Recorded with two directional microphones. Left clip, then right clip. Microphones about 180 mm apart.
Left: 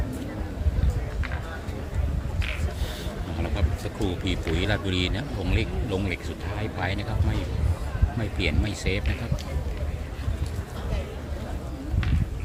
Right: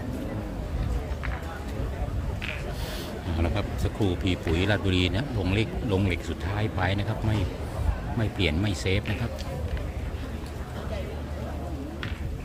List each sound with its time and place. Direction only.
3.3 s speech: 20° right (ahead or behind)